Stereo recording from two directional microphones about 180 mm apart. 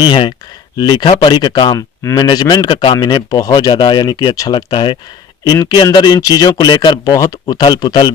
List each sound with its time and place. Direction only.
0.0 s speech: 25° left (ahead or behind)